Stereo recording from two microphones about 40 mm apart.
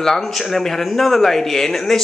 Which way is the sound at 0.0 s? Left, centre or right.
Centre.